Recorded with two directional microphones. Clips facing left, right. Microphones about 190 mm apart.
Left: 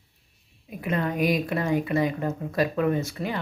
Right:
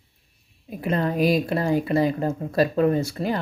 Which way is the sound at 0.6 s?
35° right (ahead or behind).